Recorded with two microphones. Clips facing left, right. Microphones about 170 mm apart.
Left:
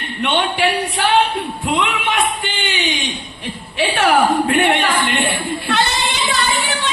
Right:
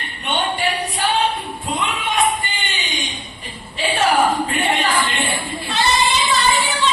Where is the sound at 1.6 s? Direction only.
80° left.